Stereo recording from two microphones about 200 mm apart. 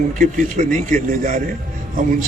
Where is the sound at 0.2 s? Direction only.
40° right (ahead or behind).